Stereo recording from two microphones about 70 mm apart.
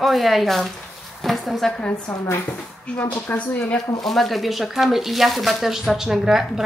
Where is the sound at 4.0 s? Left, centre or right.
Centre.